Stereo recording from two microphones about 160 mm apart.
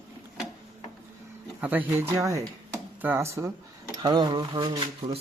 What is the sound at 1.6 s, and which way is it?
Speech, 10° right (ahead or behind).